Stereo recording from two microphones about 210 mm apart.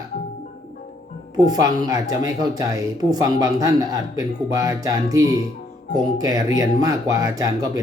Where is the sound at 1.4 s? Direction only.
20° right (ahead or behind).